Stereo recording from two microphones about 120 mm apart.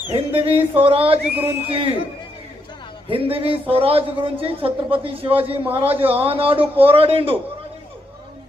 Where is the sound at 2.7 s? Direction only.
40° left (ahead or behind).